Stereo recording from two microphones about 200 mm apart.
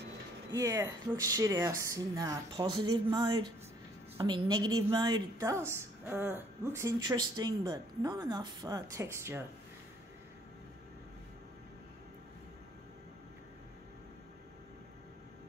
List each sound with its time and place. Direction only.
0.5 s a woman's voice: 15° right (ahead or behind)